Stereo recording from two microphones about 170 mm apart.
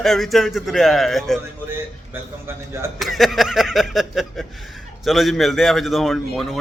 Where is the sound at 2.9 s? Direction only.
Centre (ahead or behind).